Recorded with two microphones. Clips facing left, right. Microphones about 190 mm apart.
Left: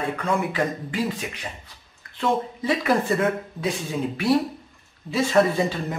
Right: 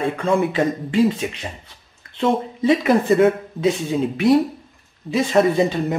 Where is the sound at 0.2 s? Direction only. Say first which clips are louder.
Right 6 dB; 25° right (ahead or behind).